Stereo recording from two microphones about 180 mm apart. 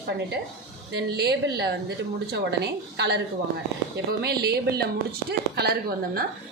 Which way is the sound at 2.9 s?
70° right (ahead or behind).